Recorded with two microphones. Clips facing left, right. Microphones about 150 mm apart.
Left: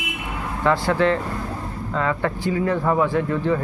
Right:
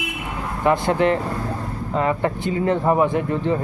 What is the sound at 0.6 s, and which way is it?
Speech, 20° right (ahead or behind).